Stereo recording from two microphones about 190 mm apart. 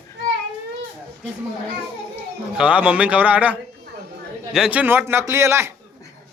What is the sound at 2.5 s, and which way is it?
A man's voice, 5° right (ahead or behind).